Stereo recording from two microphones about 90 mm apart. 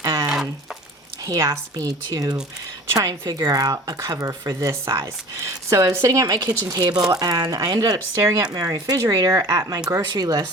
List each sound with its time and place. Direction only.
0.0 s a sound: 40° right (ahead or behind)
1.2 s speech: 40° right (ahead or behind)
7.9 s speech: 35° right (ahead or behind)